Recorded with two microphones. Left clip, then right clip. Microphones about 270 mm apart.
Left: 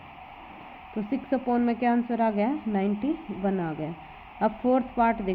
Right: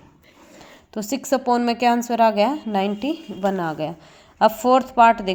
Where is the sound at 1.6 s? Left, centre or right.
Centre.